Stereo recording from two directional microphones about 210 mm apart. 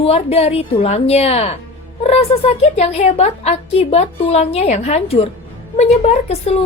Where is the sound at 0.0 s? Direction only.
30° left (ahead or behind).